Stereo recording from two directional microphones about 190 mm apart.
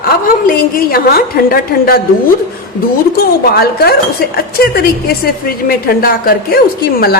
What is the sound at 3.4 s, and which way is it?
A woman's voice, 55° left (ahead or behind).